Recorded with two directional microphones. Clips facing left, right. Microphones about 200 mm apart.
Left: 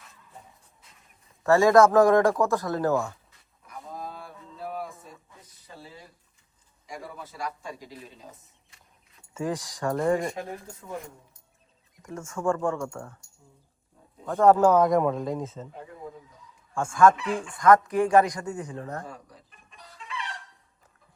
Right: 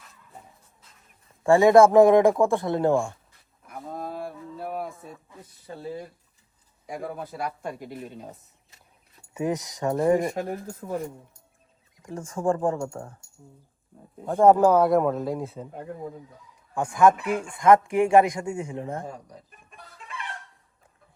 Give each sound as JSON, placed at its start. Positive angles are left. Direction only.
{"t": 1.5, "sound": "speech", "side_deg": -25}
{"t": 3.7, "sound": "a sound", "side_deg": -55}
{"t": 5.7, "sound": "speech", "side_deg": -50}
{"t": 9.3, "sound": "speech", "side_deg": -20}
{"t": 10.5, "sound": "speech", "side_deg": -45}
{"t": 12.0, "sound": "speech", "side_deg": -35}
{"t": 14.3, "sound": "speech", "side_deg": -30}
{"t": 14.6, "sound": "speech", "side_deg": -5}
{"t": 16.7, "sound": "speech", "side_deg": -20}
{"t": 19.0, "sound": "chicken", "side_deg": -40}